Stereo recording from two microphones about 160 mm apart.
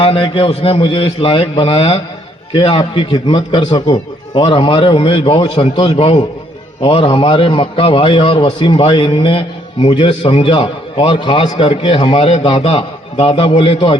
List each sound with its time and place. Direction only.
0.0 s a man's voice: 35° left (ahead or behind)